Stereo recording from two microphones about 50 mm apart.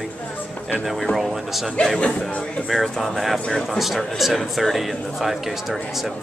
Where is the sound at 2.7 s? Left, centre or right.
Centre.